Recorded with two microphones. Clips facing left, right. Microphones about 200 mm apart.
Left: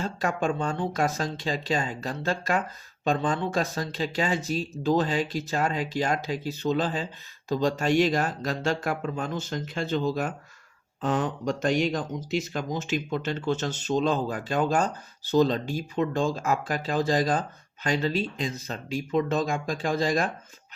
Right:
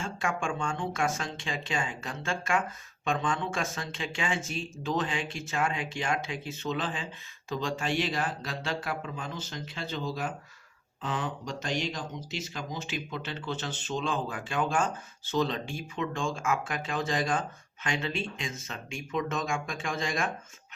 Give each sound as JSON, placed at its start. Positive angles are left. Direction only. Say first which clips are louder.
{"t": 0.0, "sound": "speech", "louder": "left 5 dB", "side_deg": 40}